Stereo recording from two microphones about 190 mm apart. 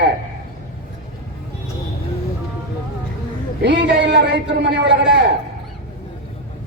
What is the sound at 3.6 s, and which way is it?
Speech, 65° right (ahead or behind).